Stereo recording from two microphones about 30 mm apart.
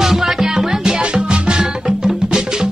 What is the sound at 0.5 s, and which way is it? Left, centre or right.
Music, right.